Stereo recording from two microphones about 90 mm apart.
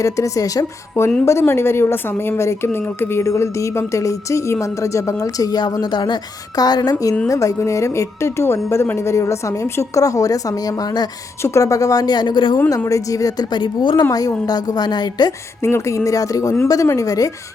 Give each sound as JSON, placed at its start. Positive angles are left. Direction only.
{"t": 0.0, "sound": "a woman's voice", "side_deg": 40}
{"t": 1.2, "sound": "a woman's voice", "side_deg": 30}
{"t": 7.3, "sound": "a woman's voice", "side_deg": 35}
{"t": 11.4, "sound": "speech", "side_deg": 35}
{"t": 12.8, "sound": "speech", "side_deg": 40}
{"t": 14.1, "sound": "speech", "side_deg": 45}
{"t": 15.6, "sound": "a woman's voice", "side_deg": 30}